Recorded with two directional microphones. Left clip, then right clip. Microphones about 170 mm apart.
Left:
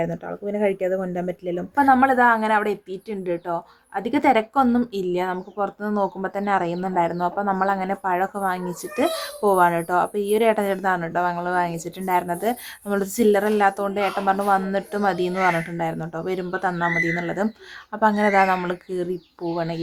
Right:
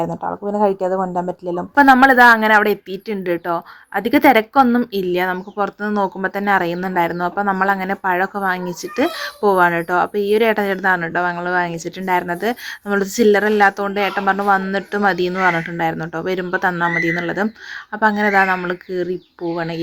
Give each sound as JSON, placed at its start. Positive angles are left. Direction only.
{"t": 1.7, "sound": "a woman's voice", "side_deg": -40}